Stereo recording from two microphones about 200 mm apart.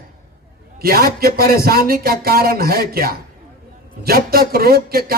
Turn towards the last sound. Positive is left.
turn(degrees=-50)  # may be behind; listen again after turning